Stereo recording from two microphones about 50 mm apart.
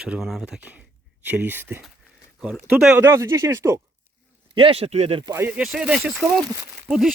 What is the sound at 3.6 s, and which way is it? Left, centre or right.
Speech, right.